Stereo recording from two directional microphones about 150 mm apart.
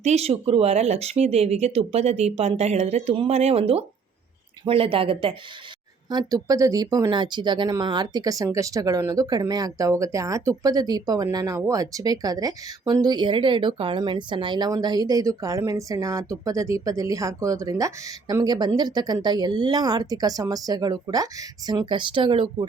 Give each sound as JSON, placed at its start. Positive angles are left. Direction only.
{"t": 0.0, "sound": "speech", "side_deg": -45}